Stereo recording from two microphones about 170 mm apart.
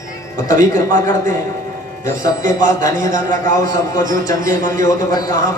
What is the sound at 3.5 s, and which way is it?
A man's voice, 20° left (ahead or behind).